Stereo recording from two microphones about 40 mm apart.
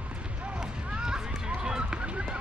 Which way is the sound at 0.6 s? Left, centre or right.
Centre.